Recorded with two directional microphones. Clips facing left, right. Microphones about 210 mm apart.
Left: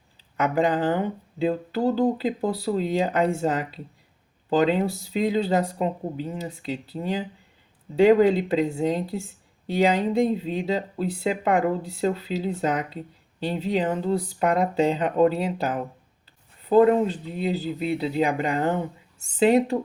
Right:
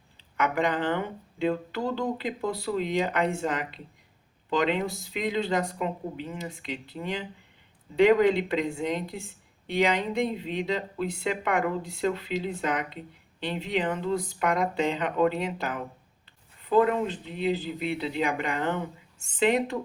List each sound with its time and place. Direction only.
0.3 s speech: 35° left (ahead or behind)